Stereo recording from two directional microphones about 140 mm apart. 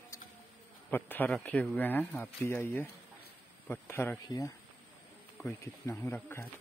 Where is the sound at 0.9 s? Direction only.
15° left (ahead or behind).